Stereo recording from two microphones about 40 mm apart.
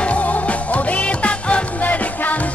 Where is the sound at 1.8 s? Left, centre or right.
Left.